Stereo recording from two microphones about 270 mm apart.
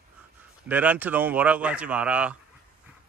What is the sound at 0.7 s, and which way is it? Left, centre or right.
Speech, centre.